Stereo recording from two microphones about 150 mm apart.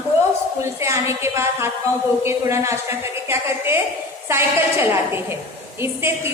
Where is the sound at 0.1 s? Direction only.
20° right (ahead or behind).